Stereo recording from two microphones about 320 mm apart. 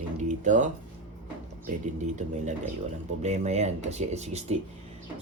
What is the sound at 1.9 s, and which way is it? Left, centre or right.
Speech, right.